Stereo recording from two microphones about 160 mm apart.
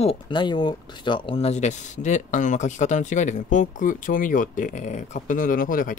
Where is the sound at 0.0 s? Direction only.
35° left (ahead or behind).